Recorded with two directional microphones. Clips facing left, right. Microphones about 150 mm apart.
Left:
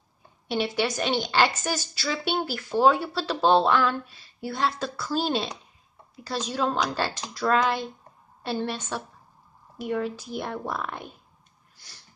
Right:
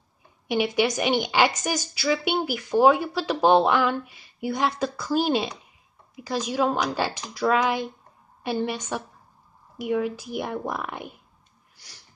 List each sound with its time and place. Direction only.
0.5 s a woman's voice: 15° right (ahead or behind)